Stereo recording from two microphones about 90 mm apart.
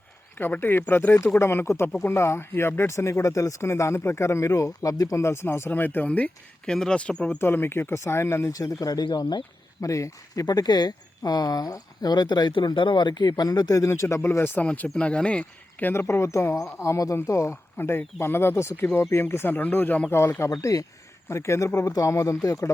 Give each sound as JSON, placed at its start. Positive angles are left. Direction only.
{"t": 0.3, "sound": "speech", "side_deg": 20}
{"t": 7.3, "sound": "speech", "side_deg": 25}
{"t": 8.5, "sound": "speech", "side_deg": 45}
{"t": 9.8, "sound": "speech", "side_deg": 35}
{"t": 10.4, "sound": "speech", "side_deg": 45}
{"t": 14.8, "sound": "speech", "side_deg": 10}
{"t": 15.9, "sound": "speech", "side_deg": 30}
{"t": 20.1, "sound": "speech", "side_deg": 30}
{"t": 20.5, "sound": "speech", "side_deg": 40}